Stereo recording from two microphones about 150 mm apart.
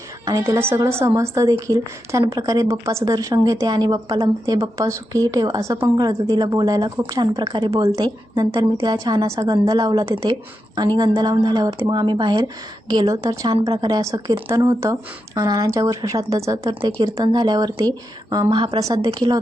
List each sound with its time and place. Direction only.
0.3 s speech: 20° right (ahead or behind)
7.8 s speech: 20° right (ahead or behind)